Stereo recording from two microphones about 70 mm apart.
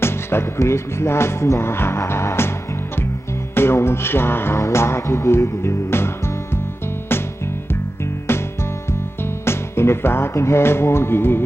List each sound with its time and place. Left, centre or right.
0.0 s music: left
3.5 s music: left
8.3 s music: left